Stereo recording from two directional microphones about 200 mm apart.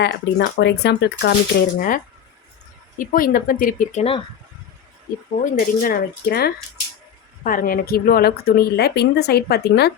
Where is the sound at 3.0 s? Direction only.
45° left (ahead or behind).